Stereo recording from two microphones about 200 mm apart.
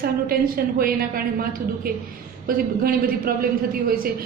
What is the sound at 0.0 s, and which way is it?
A woman's voice, 50° right (ahead or behind).